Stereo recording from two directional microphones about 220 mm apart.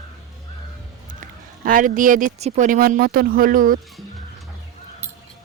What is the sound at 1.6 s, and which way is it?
Speech, 40° right (ahead or behind).